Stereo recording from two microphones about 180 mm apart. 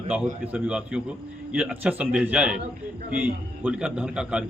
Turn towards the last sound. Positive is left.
turn(degrees=-5)  # may be behind; listen again after turning